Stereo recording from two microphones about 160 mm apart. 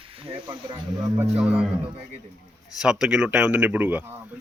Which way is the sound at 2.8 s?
5° right (ahead or behind).